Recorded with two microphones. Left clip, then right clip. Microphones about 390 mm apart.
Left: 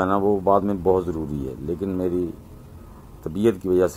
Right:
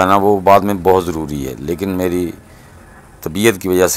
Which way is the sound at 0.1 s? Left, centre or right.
Right.